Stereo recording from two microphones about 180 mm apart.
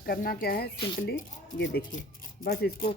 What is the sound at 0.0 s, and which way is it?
Speech, 55° left (ahead or behind).